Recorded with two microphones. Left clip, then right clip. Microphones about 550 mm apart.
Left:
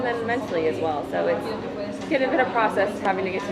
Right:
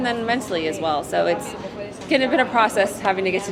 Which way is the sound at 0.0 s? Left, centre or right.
Right.